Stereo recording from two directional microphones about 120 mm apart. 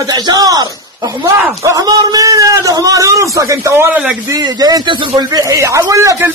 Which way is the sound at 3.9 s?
10° right (ahead or behind).